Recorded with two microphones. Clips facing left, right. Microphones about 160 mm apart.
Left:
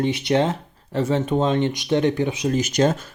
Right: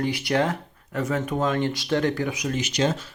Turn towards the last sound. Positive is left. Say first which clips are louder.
# left 5 dB
turn(degrees=45)  # may be behind; listen again after turning